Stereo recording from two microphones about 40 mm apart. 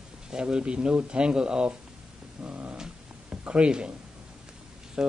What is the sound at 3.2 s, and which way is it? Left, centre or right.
Speech, right.